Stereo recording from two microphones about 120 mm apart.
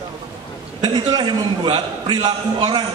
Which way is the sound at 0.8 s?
35° right (ahead or behind).